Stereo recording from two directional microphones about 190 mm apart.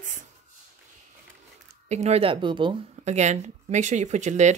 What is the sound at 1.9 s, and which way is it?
Speech, 35° right (ahead or behind).